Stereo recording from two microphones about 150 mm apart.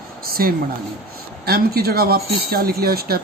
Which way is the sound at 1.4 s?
90° right.